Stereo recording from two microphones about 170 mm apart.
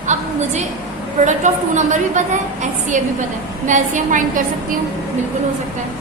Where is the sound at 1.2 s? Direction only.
45° right (ahead or behind).